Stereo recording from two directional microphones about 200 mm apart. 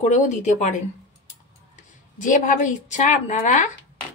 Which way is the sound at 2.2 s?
40° left (ahead or behind).